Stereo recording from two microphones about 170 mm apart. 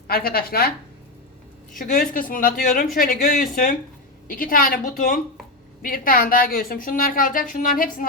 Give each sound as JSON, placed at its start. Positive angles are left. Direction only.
{"t": 0.1, "sound": "a woman's voice", "side_deg": 65}
{"t": 1.8, "sound": "a woman's voice", "side_deg": 55}